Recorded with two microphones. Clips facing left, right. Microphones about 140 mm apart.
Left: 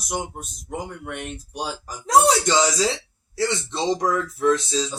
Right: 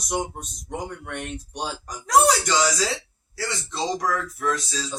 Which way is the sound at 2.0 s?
25° left (ahead or behind).